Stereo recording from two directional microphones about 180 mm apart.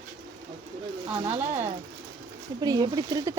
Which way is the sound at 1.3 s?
40° right (ahead or behind).